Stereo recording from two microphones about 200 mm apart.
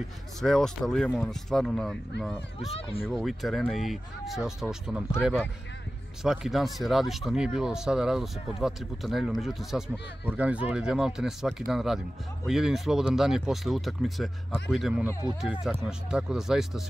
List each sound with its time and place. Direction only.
0.4 s speech: centre (ahead or behind)
2.7 s speech: 30° left (ahead or behind)
3.1 s speech: centre (ahead or behind)